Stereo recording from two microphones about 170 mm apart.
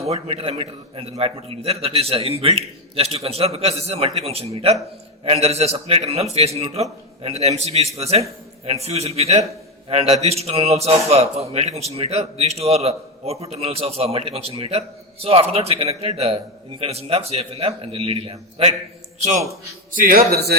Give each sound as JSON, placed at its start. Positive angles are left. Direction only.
{"t": 0.0, "sound": "a man's voice", "side_deg": -35}
{"t": 20.0, "sound": "a man's voice", "side_deg": -55}